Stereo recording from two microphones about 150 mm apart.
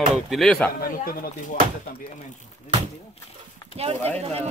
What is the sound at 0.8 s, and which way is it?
Speech, 75° left (ahead or behind).